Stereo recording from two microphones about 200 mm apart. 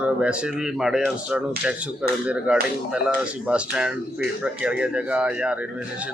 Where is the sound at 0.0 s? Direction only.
5° right (ahead or behind).